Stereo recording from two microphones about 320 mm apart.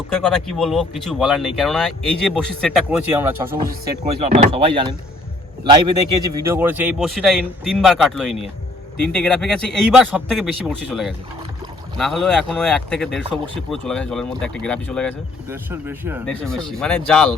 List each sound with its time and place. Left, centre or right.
0.1 s speech: centre
3.6 s speech: right; by 15.1 s centre
15.4 s speech: centre